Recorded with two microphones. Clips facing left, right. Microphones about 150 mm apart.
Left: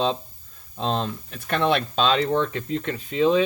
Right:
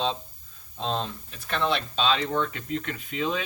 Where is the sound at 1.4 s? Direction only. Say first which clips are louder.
Left 5 dB; 55° left (ahead or behind).